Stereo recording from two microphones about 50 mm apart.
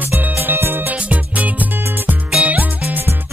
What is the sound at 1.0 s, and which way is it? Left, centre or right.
Music, right.